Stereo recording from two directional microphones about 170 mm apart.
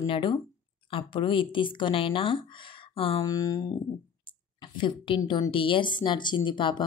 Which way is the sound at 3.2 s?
20° left (ahead or behind).